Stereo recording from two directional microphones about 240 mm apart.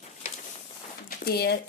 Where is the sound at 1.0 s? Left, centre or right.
Left.